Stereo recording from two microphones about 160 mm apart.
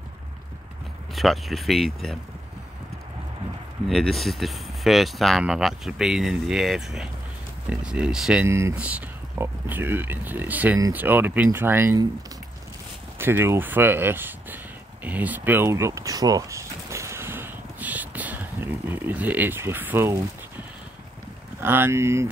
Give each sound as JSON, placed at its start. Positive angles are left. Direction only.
{"t": 1.1, "sound": "speech", "side_deg": 0}
{"t": 3.9, "sound": "speech", "side_deg": 0}
{"t": 8.5, "sound": "speech", "side_deg": -15}
{"t": 13.2, "sound": "speech", "side_deg": -15}
{"t": 15.0, "sound": "a sound", "side_deg": -10}
{"t": 21.5, "sound": "speech", "side_deg": -15}